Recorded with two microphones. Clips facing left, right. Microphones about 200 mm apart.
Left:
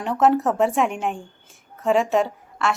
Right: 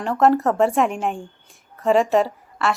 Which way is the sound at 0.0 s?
Centre (ahead or behind).